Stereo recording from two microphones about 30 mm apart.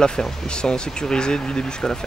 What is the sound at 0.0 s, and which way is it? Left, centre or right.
Speech, left.